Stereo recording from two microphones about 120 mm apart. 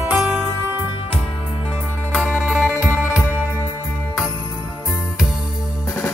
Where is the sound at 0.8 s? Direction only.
45° left (ahead or behind).